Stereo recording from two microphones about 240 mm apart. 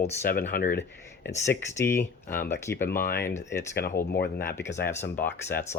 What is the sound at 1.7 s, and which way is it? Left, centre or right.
Speech, centre.